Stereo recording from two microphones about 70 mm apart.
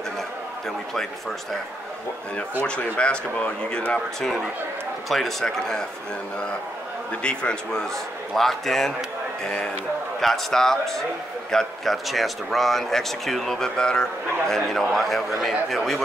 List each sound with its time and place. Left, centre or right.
2.6 s speech: centre
5.1 s speech: centre
7.2 s speech: centre